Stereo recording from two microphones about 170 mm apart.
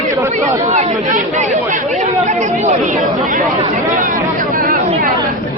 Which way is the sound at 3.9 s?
50° right (ahead or behind).